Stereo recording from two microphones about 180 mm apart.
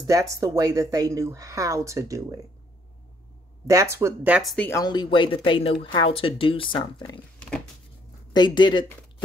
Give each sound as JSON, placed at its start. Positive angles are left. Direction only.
{"t": 0.0, "sound": "speech", "side_deg": -15}
{"t": 3.6, "sound": "speech", "side_deg": -15}
{"t": 4.6, "sound": "speech", "side_deg": 20}
{"t": 7.3, "sound": "a sound", "side_deg": 5}
{"t": 8.3, "sound": "speech", "side_deg": 25}